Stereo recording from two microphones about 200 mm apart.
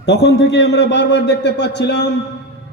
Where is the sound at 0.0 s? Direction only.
55° left (ahead or behind).